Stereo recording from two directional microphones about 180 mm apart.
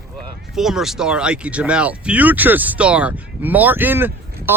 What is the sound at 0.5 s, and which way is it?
Speech, centre (ahead or behind).